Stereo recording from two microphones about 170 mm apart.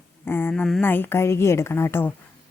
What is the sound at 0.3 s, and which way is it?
Speech, 10° left (ahead or behind).